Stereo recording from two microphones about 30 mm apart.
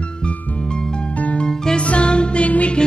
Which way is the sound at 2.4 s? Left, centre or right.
Left.